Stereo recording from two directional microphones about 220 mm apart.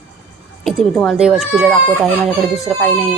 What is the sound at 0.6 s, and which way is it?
A woman's voice, centre (ahead or behind).